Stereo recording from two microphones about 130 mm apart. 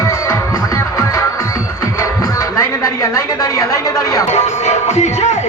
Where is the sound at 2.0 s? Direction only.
25° left (ahead or behind).